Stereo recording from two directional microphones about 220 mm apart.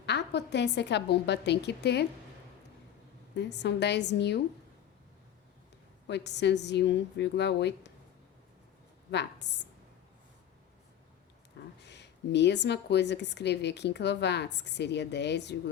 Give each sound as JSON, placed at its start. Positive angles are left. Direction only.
{"t": 0.0, "sound": "speech", "side_deg": 50}
{"t": 3.3, "sound": "speech", "side_deg": 50}
{"t": 6.1, "sound": "speech", "side_deg": 50}
{"t": 9.1, "sound": "speech", "side_deg": 50}
{"t": 11.8, "sound": "speech", "side_deg": 50}